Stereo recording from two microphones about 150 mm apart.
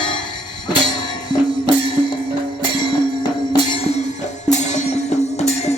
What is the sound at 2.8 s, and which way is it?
Music, 30° left (ahead or behind).